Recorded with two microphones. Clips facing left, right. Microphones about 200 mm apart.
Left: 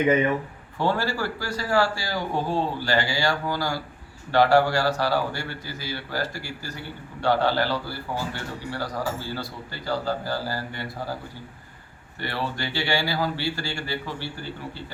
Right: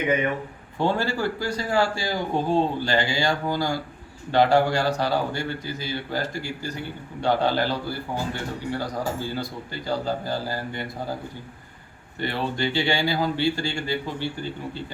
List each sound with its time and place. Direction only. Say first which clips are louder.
0.8 s a man's voice: right 1 dB; 20° right (ahead or behind)
12.2 s a man's voice: right 4 dB; 20° right (ahead or behind)